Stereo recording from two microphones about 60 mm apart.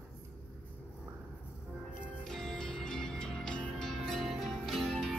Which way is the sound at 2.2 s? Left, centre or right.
Centre.